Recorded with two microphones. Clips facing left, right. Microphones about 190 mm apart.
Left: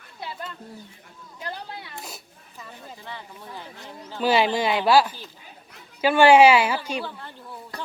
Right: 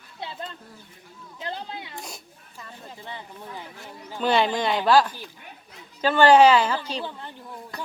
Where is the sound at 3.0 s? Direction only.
20° right (ahead or behind).